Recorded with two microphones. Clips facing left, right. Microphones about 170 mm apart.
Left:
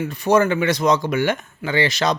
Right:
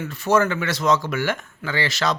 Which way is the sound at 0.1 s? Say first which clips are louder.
Left 2 dB; 15° left (ahead or behind).